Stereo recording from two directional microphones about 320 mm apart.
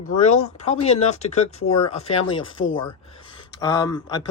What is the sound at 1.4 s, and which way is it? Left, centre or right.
Speech, left.